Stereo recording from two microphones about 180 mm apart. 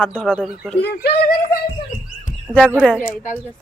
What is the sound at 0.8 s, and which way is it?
Speech, 70° left (ahead or behind).